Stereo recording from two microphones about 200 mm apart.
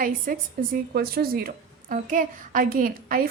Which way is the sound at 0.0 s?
45° right (ahead or behind).